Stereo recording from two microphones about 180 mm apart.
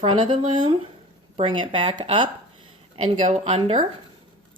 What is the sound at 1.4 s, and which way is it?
A woman's voice, 30° right (ahead or behind).